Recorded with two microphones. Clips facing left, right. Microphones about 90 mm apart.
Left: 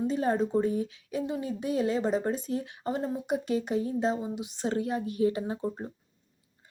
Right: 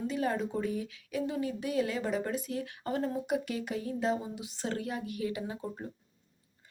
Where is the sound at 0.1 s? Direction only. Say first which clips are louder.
Left 5 dB; 30° left (ahead or behind).